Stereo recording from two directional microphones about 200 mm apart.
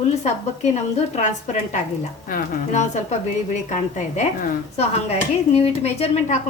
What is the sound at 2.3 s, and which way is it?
A woman's voice, 35° left (ahead or behind).